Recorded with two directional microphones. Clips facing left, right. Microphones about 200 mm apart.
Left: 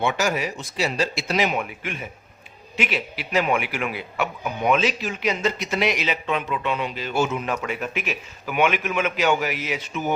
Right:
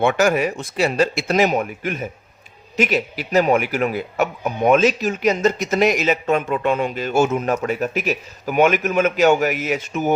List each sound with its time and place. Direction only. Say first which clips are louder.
0.0 s a man's voice: right 7 dB; 55° right (ahead or behind)